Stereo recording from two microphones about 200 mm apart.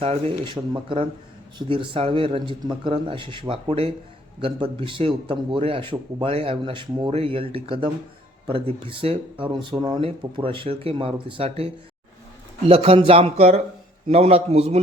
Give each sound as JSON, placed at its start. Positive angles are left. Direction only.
{"t": 0.0, "sound": "a man's voice", "side_deg": -25}